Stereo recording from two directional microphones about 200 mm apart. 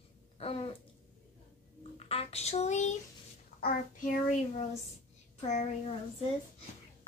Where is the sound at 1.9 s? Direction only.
30° left (ahead or behind).